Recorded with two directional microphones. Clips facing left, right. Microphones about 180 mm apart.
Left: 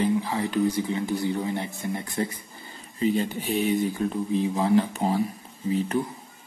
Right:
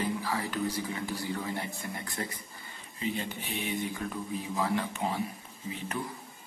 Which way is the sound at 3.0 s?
35° left (ahead or behind).